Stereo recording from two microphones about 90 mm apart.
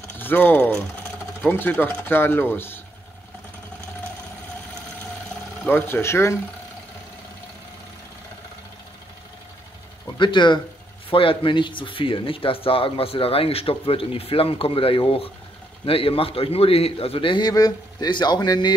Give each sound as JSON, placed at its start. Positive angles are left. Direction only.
{"t": 0.2, "sound": "speech", "side_deg": 20}
{"t": 5.7, "sound": "speech", "side_deg": 25}
{"t": 10.1, "sound": "speech", "side_deg": 60}
{"t": 11.1, "sound": "speech", "side_deg": 80}
{"t": 17.4, "sound": "speech", "side_deg": 45}